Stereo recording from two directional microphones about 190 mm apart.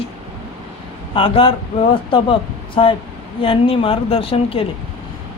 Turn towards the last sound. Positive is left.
turn(degrees=30)  # may be behind; listen again after turning